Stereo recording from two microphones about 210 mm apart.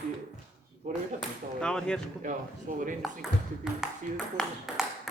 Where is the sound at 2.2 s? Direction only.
40° right (ahead or behind).